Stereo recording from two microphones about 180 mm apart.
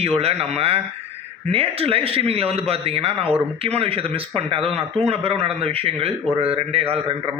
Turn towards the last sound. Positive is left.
turn(degrees=-35)  # may be behind; listen again after turning